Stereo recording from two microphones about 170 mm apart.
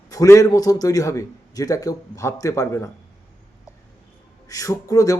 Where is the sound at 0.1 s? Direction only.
20° left (ahead or behind).